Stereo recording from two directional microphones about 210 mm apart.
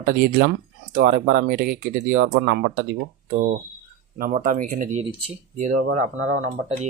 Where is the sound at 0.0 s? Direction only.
40° right (ahead or behind).